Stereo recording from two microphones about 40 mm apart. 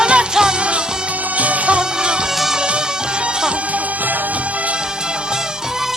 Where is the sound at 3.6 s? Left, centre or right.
Right.